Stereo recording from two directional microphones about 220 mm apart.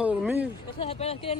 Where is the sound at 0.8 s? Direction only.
25° left (ahead or behind).